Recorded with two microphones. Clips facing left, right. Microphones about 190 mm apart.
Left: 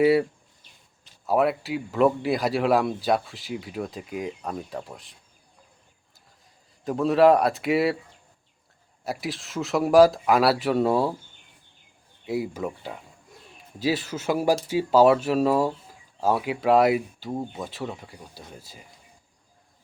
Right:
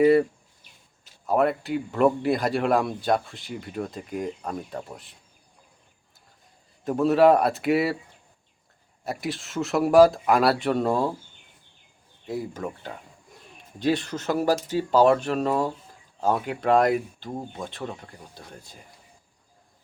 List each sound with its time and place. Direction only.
0.0 s speech: 5° left (ahead or behind)
1.3 s speech: 5° left (ahead or behind)
6.8 s speech: centre (ahead or behind)
9.0 s speech: centre (ahead or behind)
12.2 s speech: 10° left (ahead or behind)